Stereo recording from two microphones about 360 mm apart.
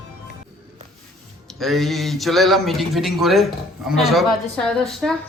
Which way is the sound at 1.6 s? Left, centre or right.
Centre.